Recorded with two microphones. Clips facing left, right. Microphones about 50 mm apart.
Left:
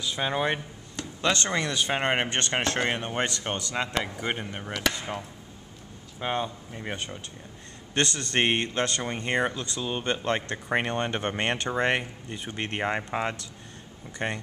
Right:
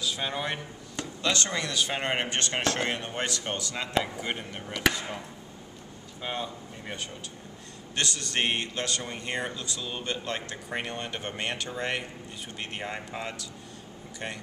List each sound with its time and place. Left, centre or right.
0.1 s speech: centre
2.8 s speech: centre
4.7 s speech: centre
6.2 s speech: left
7.9 s speech: left